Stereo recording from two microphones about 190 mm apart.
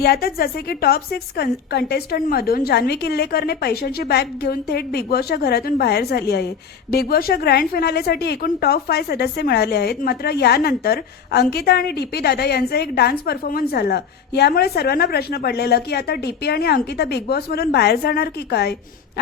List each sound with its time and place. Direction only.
0.0 s a woman's voice: 55° left (ahead or behind)